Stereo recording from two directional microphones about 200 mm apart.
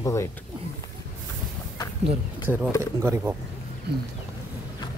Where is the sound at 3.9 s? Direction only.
55° right (ahead or behind).